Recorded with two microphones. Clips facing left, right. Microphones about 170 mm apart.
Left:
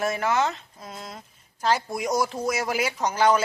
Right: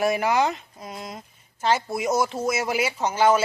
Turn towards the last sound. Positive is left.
turn(degrees=-5)  # may be behind; listen again after turning